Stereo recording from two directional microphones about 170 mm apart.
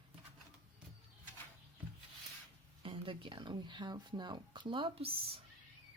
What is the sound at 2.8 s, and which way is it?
Speech, 30° right (ahead or behind).